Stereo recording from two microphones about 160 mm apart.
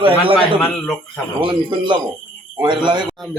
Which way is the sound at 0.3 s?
10° left (ahead or behind).